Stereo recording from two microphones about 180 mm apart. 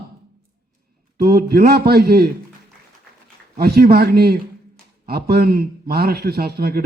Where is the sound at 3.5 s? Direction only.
60° right (ahead or behind).